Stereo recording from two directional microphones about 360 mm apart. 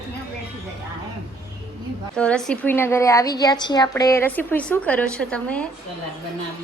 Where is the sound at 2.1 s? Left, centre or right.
Centre.